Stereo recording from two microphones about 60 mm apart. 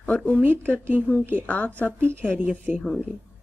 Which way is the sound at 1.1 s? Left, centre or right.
Left.